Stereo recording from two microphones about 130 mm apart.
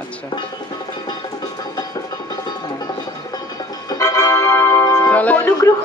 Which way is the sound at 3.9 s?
25° left (ahead or behind).